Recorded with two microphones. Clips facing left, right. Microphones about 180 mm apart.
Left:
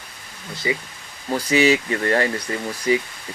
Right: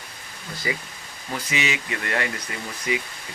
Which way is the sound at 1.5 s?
35° left (ahead or behind).